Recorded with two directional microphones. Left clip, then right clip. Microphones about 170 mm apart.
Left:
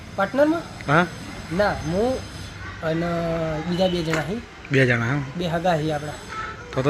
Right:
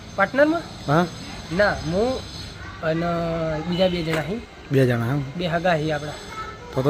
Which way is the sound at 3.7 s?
Centre (ahead or behind).